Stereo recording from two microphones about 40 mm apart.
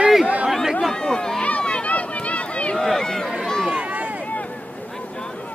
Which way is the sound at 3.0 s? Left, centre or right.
Centre.